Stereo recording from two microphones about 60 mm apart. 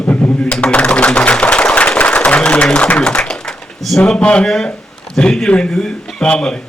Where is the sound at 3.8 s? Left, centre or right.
Centre.